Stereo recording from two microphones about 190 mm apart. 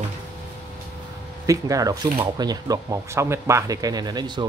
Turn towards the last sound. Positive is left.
turn(degrees=-20)  # may be behind; listen again after turning